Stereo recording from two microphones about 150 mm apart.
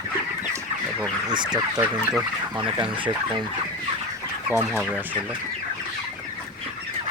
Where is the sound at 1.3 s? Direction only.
30° right (ahead or behind).